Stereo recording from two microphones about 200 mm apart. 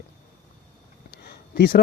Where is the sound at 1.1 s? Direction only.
55° left (ahead or behind).